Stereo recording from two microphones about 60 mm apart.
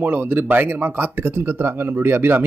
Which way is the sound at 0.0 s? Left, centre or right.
Right.